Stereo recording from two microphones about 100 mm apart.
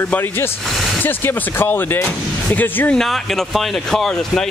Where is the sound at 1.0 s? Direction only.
20° left (ahead or behind).